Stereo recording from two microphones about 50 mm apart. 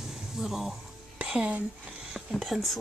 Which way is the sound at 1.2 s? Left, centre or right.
Right.